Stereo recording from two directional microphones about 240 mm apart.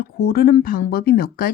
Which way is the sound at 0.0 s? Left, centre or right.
Left.